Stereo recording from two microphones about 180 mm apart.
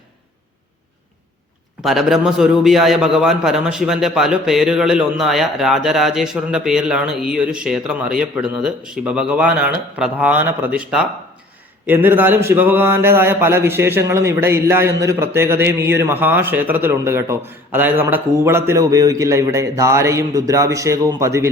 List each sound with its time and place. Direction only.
1.8 s a man's voice: centre (ahead or behind); by 21.5 s 15° right (ahead or behind)